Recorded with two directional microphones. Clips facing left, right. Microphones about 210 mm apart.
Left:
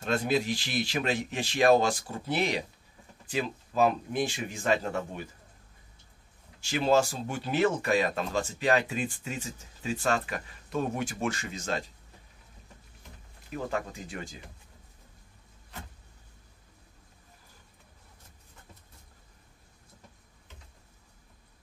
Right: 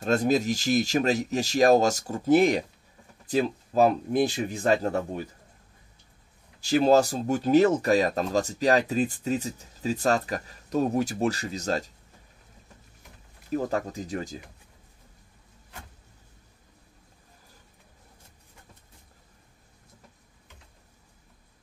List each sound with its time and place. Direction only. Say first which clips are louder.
0.0 s speech: right 5 dB; 40° right (ahead or behind)
6.6 s speech: right 5 dB; 35° right (ahead or behind)
13.5 s speech: right 6 dB; 40° right (ahead or behind)